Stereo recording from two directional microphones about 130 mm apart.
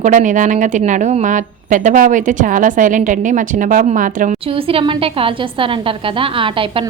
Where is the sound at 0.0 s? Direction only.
80° right.